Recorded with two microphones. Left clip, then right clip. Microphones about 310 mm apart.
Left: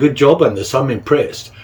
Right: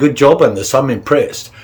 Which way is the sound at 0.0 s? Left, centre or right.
Centre.